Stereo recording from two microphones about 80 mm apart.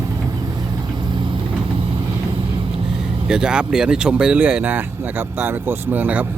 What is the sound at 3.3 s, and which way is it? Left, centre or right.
Speech, centre.